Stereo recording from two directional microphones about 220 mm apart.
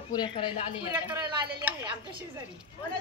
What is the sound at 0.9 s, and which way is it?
Speech, 10° right (ahead or behind).